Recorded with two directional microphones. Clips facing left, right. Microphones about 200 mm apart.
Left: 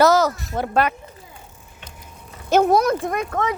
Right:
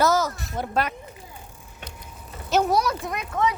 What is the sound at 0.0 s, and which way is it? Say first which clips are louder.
Speech: left 6 dB; 75° left (ahead or behind).